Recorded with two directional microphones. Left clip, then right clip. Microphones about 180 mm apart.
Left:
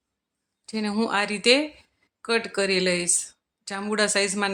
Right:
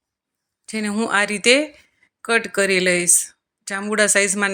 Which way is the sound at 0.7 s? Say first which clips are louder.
Right 4 dB; 15° right (ahead or behind).